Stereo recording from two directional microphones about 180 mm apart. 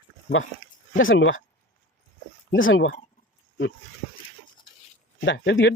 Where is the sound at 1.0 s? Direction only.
90° left.